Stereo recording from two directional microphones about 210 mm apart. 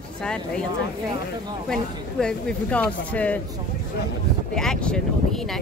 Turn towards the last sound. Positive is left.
turn(degrees=5)  # may be behind; listen again after turning